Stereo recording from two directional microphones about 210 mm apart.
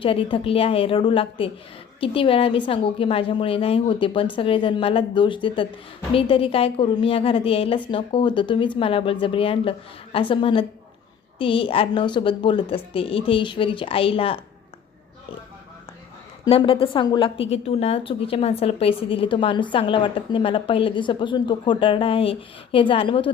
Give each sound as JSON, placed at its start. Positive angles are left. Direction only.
{"t": 0.0, "sound": "a woman's voice", "side_deg": 25}
{"t": 16.5, "sound": "a woman's voice", "side_deg": 25}